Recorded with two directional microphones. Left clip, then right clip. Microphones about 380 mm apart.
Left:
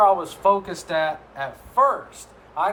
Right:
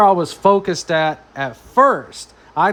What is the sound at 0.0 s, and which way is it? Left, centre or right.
Speech, right.